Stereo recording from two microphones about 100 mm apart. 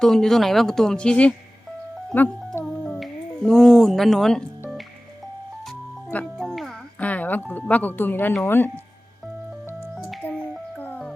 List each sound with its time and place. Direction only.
0.0 s speech: 5° left (ahead or behind)
2.6 s a sound: 5° left (ahead or behind)
6.3 s music: centre (ahead or behind)
7.0 s speech: 15° left (ahead or behind)
10.2 s music: 20° left (ahead or behind)